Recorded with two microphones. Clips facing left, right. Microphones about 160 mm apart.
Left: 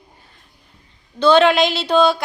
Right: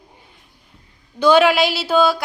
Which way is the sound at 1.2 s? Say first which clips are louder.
Left 1 dB; 10° right (ahead or behind).